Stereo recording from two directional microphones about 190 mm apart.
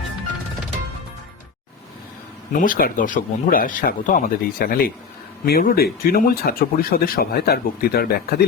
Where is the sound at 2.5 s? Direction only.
45° left (ahead or behind).